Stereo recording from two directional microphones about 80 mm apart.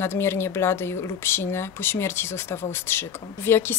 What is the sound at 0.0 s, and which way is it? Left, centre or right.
Speech, left.